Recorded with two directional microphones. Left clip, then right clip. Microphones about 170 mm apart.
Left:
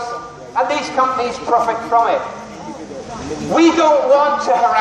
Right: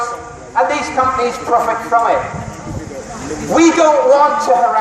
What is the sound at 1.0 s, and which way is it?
A man's voice, 40° right (ahead or behind).